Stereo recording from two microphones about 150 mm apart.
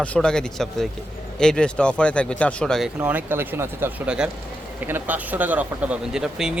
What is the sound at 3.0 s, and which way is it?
Speech, 15° right (ahead or behind).